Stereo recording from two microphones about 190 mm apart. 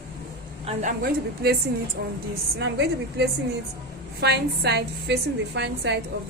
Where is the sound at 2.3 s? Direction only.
65° right (ahead or behind).